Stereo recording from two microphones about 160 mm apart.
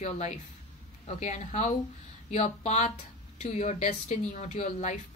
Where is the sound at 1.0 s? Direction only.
45° left (ahead or behind).